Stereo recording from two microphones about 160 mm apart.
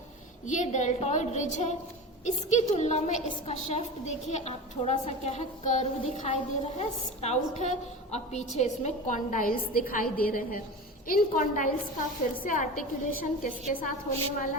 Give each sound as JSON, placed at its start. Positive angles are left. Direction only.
{"t": 0.4, "sound": "a woman's voice", "side_deg": 50}